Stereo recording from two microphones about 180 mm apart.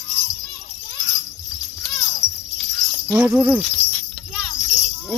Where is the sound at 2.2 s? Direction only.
25° right (ahead or behind).